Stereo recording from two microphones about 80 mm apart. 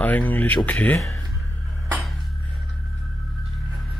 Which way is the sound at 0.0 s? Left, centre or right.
Left.